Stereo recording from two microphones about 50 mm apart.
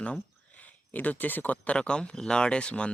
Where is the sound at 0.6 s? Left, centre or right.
Left.